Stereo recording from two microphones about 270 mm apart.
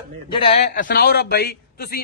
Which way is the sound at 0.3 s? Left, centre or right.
Centre.